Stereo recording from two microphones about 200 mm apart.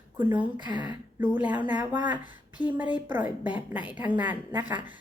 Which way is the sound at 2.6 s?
20° left (ahead or behind).